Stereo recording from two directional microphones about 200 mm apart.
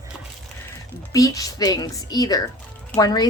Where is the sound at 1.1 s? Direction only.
15° left (ahead or behind).